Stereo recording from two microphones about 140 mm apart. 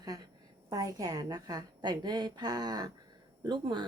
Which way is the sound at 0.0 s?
25° right (ahead or behind).